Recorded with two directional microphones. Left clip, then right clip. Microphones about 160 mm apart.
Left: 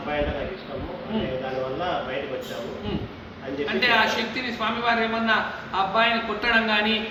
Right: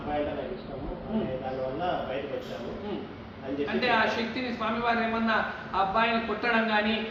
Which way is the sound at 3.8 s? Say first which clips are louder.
Left 5 dB; 15° left (ahead or behind).